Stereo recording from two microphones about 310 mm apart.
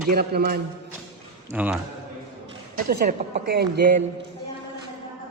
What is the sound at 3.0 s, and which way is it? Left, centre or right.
Speech, right.